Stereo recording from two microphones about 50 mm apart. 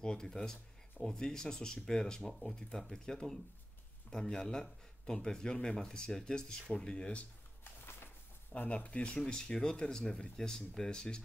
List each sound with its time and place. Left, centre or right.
0.0 s speech: centre
8.5 s speech: left